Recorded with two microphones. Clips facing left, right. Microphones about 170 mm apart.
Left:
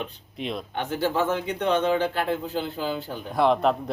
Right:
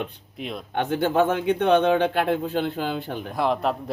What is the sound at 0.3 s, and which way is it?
Speech, 5° right (ahead or behind).